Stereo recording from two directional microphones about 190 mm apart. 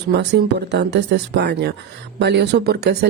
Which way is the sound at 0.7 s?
65° right (ahead or behind).